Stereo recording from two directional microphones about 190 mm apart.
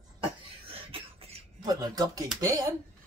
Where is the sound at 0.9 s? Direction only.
30° right (ahead or behind).